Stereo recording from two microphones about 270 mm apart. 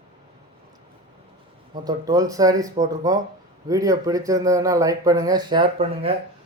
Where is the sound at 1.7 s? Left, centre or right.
Centre.